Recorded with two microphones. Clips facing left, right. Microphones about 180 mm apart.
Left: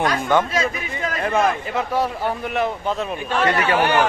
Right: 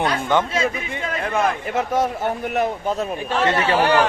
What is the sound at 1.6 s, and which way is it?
A man's voice, 45° right (ahead or behind).